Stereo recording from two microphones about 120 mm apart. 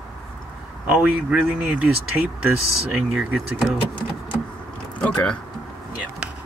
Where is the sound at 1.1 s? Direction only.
15° right (ahead or behind).